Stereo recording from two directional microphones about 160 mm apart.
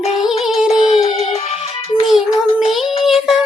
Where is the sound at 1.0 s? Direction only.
40° left (ahead or behind).